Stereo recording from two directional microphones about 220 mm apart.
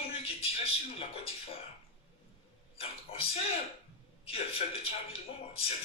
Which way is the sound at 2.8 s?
25° left (ahead or behind).